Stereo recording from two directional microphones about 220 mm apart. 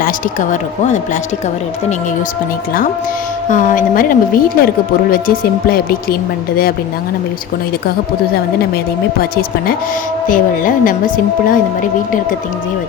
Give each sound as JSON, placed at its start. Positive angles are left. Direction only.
{"t": 0.0, "sound": "a woman's voice", "side_deg": 35}
{"t": 3.5, "sound": "a woman's voice", "side_deg": 35}
{"t": 10.2, "sound": "a woman's voice", "side_deg": 40}